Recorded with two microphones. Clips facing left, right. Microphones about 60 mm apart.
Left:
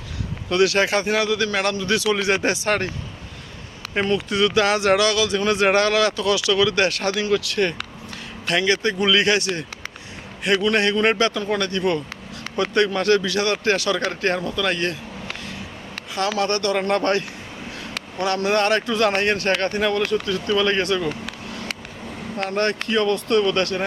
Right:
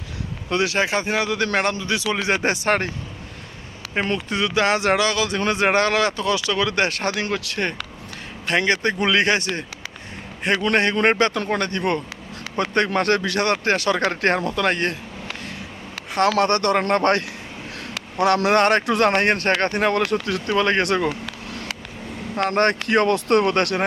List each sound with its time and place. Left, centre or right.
0.5 s speech: right
4.0 s speech: right
16.1 s speech: right
18.2 s speech: right
18.6 s speech: right
20.6 s speech: right
20.8 s speech: right
22.4 s speech: right